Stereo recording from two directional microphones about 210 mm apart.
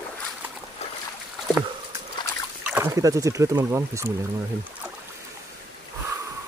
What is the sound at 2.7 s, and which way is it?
Speech, 15° right (ahead or behind).